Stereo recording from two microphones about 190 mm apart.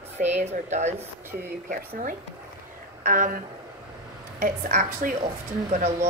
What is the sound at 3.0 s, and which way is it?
A woman's voice, 45° right (ahead or behind).